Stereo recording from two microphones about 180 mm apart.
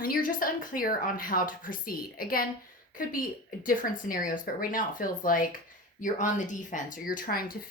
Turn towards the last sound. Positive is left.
turn(degrees=55)  # may be behind; listen again after turning